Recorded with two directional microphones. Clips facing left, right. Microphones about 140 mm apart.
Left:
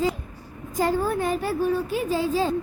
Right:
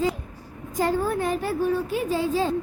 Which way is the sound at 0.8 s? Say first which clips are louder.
Even; 10° left (ahead or behind).